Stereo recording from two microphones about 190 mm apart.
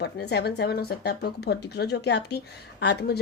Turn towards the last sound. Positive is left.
turn(degrees=60)  # may be behind; listen again after turning